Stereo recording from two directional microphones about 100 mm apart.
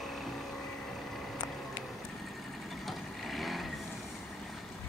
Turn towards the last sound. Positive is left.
turn(degrees=0)  # may be behind; listen again after turning